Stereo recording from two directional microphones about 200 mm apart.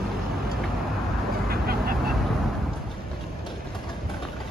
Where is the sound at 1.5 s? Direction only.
50° right (ahead or behind).